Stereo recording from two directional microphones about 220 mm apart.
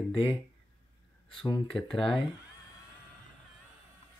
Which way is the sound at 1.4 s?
20° left (ahead or behind).